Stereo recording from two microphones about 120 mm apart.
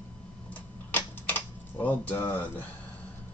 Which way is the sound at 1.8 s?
15° left (ahead or behind).